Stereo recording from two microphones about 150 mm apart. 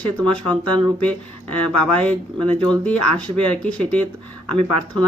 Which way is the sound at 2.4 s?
30° right (ahead or behind).